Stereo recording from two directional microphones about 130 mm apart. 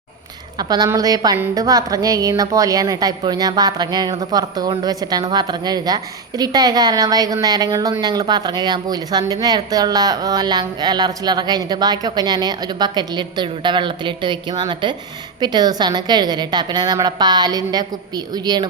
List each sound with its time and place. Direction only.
0.9 s a woman's voice: 30° right (ahead or behind)